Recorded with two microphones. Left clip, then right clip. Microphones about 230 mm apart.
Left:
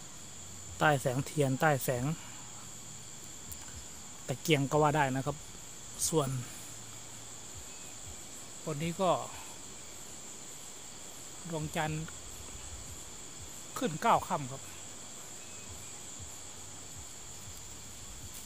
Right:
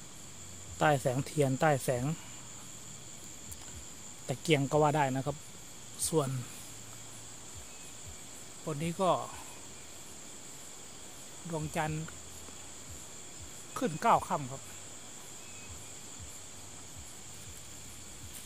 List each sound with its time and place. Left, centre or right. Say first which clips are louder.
0.7 s speech: even; centre
4.3 s speech: right 1 dB; centre
8.6 s speech: even; centre
11.5 s speech: even; centre
13.7 s speech: right 1 dB; centre